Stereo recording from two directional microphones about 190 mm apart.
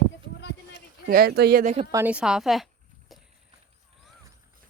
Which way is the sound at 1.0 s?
50° right (ahead or behind).